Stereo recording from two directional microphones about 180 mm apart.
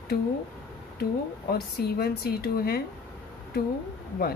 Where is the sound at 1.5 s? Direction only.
60° left (ahead or behind).